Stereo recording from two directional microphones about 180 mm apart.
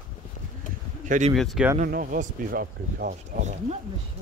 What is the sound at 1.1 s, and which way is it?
Speech, 40° right (ahead or behind).